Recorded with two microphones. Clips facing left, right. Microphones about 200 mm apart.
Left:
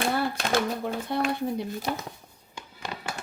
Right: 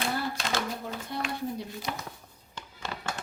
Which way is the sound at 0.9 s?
60° left (ahead or behind).